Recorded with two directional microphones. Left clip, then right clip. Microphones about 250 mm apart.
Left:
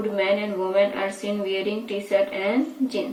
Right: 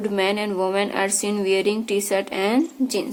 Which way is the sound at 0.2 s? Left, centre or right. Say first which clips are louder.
Right 1 dB; right.